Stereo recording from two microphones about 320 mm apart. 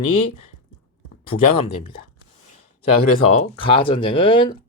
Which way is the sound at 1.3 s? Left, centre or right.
Left.